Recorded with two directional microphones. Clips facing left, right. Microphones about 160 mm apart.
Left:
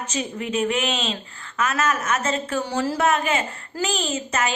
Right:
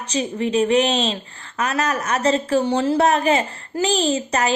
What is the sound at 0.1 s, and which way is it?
A woman's voice, 30° right (ahead or behind).